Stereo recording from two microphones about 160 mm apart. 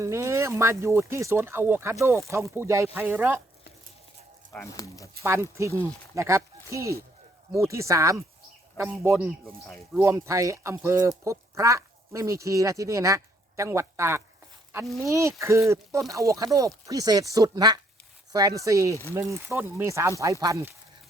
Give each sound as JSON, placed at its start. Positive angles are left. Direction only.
{"t": 0.0, "sound": "speech", "side_deg": -20}
{"t": 4.6, "sound": "speech", "side_deg": 20}
{"t": 5.2, "sound": "speech", "side_deg": -15}